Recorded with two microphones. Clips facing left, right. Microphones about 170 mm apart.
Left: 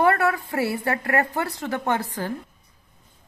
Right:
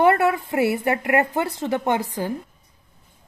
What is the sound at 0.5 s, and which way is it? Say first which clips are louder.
A woman's voice: right 4 dB; 20° right (ahead or behind).